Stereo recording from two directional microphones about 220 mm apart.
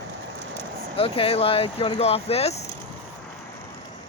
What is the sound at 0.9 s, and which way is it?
Speech, 25° left (ahead or behind).